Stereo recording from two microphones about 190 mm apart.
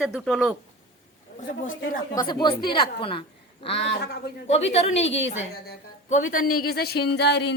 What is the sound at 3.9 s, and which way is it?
Speech, 65° left (ahead or behind).